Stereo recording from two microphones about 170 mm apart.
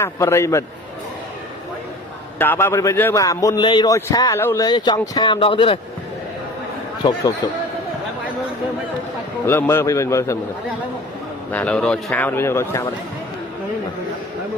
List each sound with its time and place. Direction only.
0.0 s a man's voice: 15° left (ahead or behind)
2.4 s a man's voice: 10° left (ahead or behind); by 5.8 s 30° left (ahead or behind)
9.5 s a man's voice: 15° left (ahead or behind)
11.5 s a man's voice: 5° left (ahead or behind)